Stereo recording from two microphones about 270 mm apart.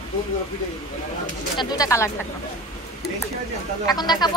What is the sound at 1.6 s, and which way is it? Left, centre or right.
Speech, centre.